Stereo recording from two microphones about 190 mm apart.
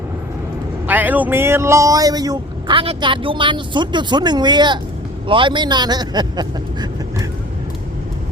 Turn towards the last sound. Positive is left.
turn(degrees=-20)  # may be behind; listen again after turning